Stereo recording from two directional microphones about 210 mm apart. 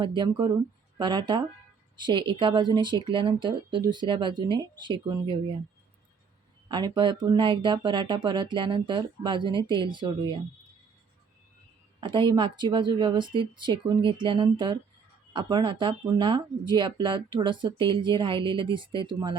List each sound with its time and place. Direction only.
0.2 s speech: 20° right (ahead or behind)
6.7 s speech: 20° right (ahead or behind)
11.9 s speech: 25° right (ahead or behind)